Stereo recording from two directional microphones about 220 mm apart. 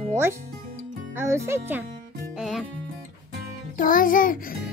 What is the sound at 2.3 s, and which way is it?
Music, centre (ahead or behind).